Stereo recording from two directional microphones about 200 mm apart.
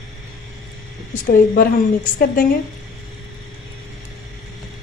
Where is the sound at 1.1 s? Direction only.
40° left (ahead or behind).